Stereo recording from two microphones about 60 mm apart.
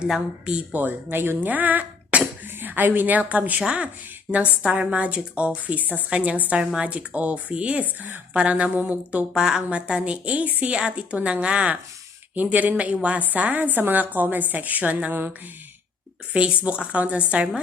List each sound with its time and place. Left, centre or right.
0.7 s a woman's voice: right
9.3 s a woman's voice: centre; by 15.3 s right
16.3 s a woman's voice: centre